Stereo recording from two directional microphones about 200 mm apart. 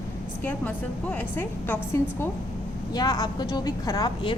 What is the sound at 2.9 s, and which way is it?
A woman's voice, 20° left (ahead or behind).